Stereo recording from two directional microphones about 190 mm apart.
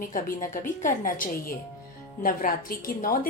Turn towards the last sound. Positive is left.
turn(degrees=50)  # may be behind; listen again after turning